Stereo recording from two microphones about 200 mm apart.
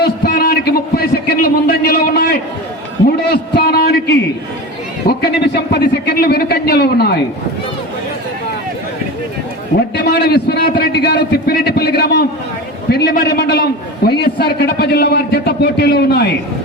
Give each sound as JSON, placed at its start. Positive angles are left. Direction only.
{"t": 0.0, "sound": "a sound", "side_deg": 55}
{"t": 5.0, "sound": "a man's voice", "side_deg": 55}
{"t": 9.9, "sound": "a man's voice", "side_deg": 55}